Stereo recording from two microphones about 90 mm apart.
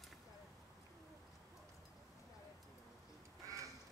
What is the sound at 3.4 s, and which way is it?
Crow, 40° right (ahead or behind).